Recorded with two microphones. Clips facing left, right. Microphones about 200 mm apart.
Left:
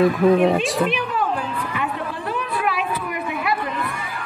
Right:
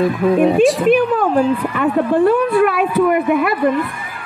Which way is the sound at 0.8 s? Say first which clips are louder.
Right 10 dB; 50° right (ahead or behind).